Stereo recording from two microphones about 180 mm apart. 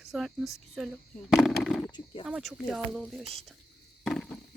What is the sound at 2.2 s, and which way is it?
Speech, centre (ahead or behind).